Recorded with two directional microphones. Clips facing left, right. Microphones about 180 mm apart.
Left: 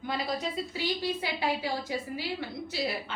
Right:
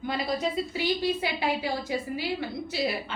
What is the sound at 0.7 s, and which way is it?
Speech, 15° right (ahead or behind).